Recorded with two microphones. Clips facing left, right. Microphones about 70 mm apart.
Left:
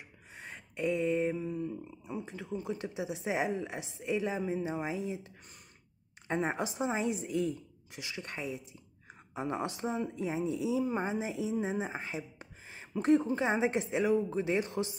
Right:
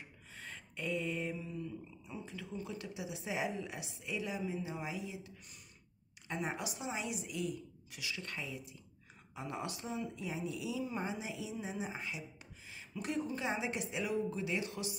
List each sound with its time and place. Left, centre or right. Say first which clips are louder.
0.4 s speech: left 8 dB; left
6.2 s speech: left 7 dB; left